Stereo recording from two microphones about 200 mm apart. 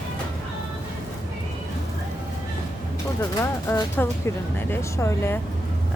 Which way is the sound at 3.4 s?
15° left (ahead or behind).